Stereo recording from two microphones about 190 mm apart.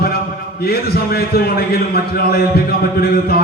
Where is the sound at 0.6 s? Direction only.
55° left (ahead or behind).